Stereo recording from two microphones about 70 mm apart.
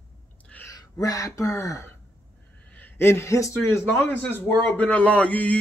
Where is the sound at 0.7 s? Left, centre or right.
Left.